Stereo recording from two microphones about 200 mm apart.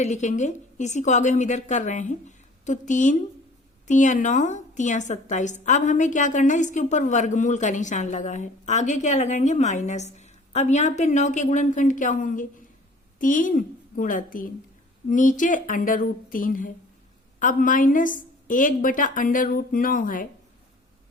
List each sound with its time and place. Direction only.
0.0 s a woman's voice: 35° left (ahead or behind)